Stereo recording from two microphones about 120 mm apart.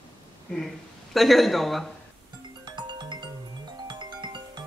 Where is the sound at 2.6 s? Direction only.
40° right (ahead or behind).